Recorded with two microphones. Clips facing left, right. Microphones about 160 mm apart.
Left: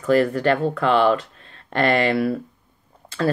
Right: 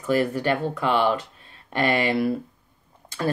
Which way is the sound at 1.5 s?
10° right (ahead or behind).